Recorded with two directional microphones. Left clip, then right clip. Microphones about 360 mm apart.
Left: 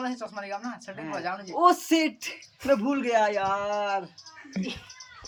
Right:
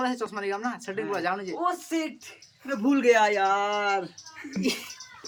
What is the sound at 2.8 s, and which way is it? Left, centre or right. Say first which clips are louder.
Speech: right 3 dB; centre.